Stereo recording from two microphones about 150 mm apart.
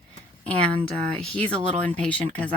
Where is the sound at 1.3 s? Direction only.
5° left (ahead or behind).